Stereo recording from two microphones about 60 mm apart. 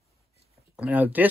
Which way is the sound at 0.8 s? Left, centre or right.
Right.